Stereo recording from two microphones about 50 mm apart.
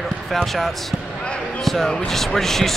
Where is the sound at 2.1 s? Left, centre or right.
Centre.